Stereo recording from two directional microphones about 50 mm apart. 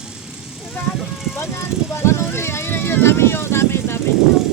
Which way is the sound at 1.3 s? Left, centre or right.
Left.